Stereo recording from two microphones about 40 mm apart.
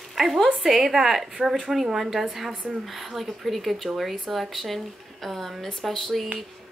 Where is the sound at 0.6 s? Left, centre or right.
Centre.